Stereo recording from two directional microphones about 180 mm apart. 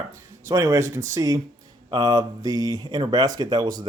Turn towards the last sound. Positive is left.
turn(degrees=-20)  # may be behind; listen again after turning